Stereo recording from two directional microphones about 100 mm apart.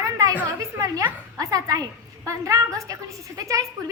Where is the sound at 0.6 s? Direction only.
35° right (ahead or behind).